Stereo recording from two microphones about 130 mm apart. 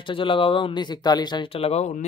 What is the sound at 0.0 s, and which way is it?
Speech, 40° left (ahead or behind).